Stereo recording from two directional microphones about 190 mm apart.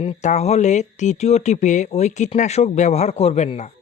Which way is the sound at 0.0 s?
35° left (ahead or behind).